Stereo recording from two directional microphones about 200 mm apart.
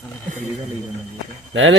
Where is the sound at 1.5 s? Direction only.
70° right (ahead or behind).